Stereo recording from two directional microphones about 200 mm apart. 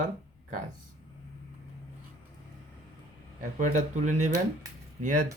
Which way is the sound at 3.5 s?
40° right (ahead or behind).